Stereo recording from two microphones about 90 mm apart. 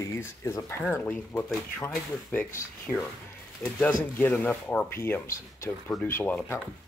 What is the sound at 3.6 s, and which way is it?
Speech, 20° left (ahead or behind).